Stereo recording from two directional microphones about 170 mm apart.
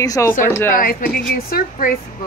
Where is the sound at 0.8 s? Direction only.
60° left (ahead or behind).